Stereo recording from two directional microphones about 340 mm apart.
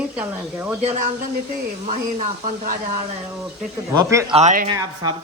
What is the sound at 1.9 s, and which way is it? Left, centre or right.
Speech, right.